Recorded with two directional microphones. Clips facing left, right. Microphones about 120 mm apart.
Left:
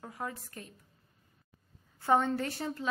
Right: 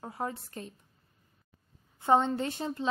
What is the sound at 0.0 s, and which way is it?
Speech, 30° right (ahead or behind).